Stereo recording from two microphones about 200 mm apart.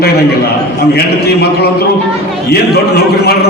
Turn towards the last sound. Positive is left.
turn(degrees=50)  # may be behind; listen again after turning